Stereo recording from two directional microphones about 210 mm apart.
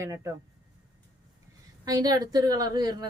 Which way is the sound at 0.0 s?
15° right (ahead or behind).